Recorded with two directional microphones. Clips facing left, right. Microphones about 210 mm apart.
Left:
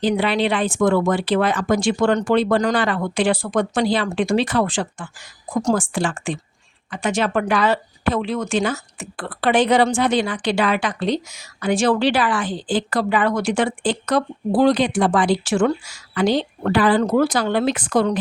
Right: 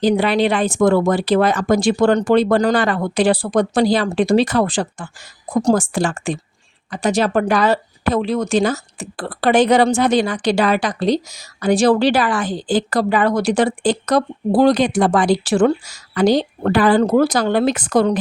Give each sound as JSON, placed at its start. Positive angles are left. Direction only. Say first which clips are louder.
{"t": 0.0, "sound": "speech", "louder": "right 4 dB", "side_deg": -40}